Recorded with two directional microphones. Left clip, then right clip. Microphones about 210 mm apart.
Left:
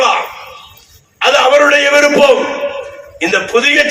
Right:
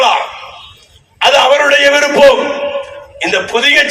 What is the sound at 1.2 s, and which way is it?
A man's voice, 40° right (ahead or behind).